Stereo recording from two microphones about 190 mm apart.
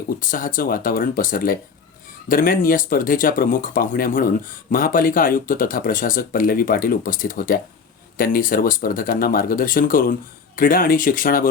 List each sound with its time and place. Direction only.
0.2 s speech: 45° left (ahead or behind)